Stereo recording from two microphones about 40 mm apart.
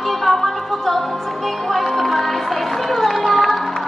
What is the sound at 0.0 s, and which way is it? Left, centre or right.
Music, centre.